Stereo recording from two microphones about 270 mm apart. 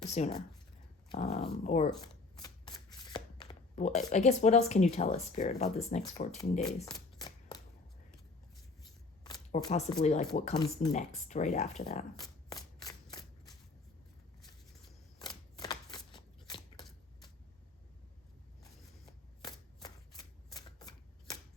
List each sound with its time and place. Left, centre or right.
0.0 s speech: left
2.0 s shuffling cards: centre
3.8 s speech: left
6.7 s speech: centre
7.2 s typewriter: centre
9.6 s speech: centre
15.2 s shuffling cards: centre
19.4 s shuffling cards: centre